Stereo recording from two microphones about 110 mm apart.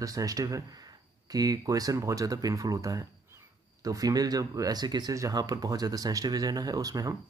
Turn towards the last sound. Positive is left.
turn(degrees=-35)  # may be behind; listen again after turning